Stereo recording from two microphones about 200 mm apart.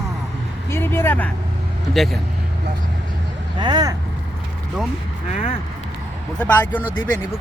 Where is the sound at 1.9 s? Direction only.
Centre (ahead or behind).